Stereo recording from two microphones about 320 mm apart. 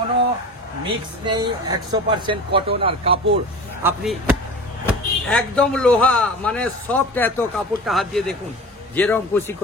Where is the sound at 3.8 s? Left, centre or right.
Centre.